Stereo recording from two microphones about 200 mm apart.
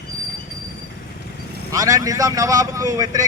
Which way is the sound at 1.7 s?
20° right (ahead or behind).